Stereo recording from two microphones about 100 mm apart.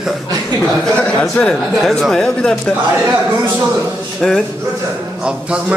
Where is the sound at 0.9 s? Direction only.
10° left (ahead or behind).